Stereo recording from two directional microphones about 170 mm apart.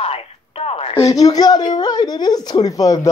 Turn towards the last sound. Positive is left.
turn(degrees=20)  # may be behind; listen again after turning